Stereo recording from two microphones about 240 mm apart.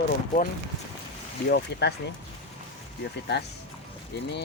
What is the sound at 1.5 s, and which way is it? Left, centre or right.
Speech, left.